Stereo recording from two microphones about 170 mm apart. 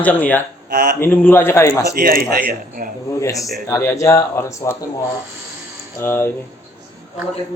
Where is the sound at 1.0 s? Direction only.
10° left (ahead or behind).